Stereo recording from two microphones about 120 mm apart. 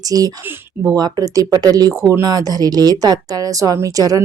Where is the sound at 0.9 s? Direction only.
35° right (ahead or behind).